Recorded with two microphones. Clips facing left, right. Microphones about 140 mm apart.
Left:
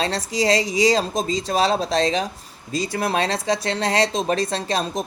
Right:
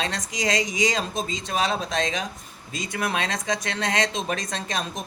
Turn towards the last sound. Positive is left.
turn(degrees=35)  # may be behind; listen again after turning